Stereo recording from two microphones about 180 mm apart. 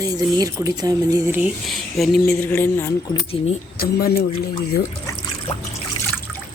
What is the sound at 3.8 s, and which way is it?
Speech, 60° left (ahead or behind).